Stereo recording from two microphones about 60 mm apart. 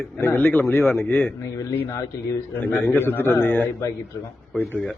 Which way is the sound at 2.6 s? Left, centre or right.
Left.